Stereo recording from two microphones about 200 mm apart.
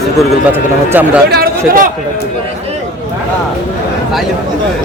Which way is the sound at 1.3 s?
45° right (ahead or behind).